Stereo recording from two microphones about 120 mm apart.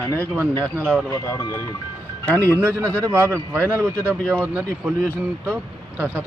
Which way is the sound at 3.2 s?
20° right (ahead or behind).